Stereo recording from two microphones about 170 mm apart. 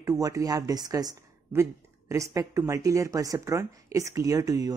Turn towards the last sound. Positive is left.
turn(degrees=-20)  # may be behind; listen again after turning